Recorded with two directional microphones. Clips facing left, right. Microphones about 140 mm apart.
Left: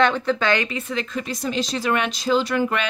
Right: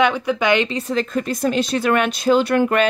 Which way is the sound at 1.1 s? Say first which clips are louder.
Right 5 dB; 55° right (ahead or behind).